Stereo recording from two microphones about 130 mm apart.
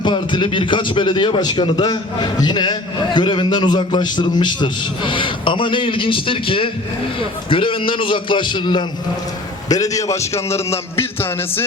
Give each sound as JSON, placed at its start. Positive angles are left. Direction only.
{"t": 0.0, "sound": "a man's voice", "side_deg": 40}